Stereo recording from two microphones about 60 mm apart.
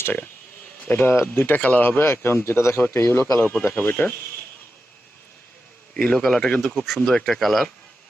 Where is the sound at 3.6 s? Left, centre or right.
Left.